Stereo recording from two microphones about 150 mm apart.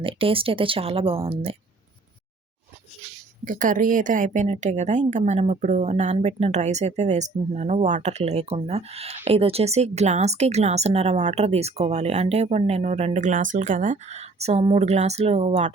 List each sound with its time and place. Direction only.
0.0 s speech: 35° right (ahead or behind)
3.4 s speech: 60° right (ahead or behind)